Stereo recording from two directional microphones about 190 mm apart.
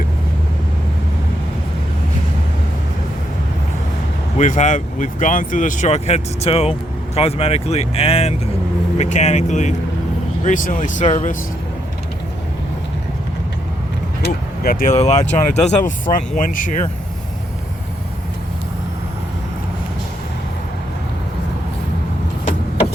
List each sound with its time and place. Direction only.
4.4 s speech: 40° left (ahead or behind)
14.3 s vehicle: 50° left (ahead or behind)
14.9 s speech: 35° left (ahead or behind)